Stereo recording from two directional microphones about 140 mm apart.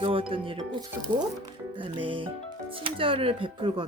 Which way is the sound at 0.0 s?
40° right (ahead or behind).